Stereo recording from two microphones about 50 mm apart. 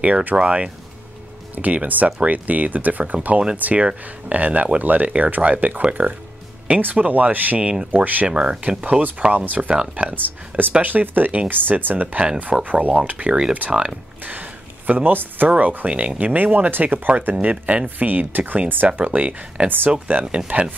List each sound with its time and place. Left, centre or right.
0.0 s speech: right
0.4 s speech: right
7.6 s speech: centre
7.9 s speech: right
8.3 s speech: centre
9.3 s speech: right
9.7 s speech: centre
10.0 s speech: right
12.5 s speech: centre
12.8 s speech: right
14.2 s speech: right